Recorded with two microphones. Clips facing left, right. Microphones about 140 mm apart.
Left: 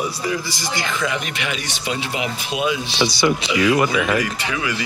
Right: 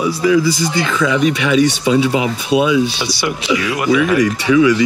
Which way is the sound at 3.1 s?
5° right (ahead or behind).